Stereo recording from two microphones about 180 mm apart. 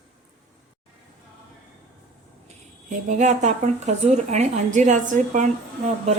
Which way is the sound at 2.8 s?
45° right (ahead or behind).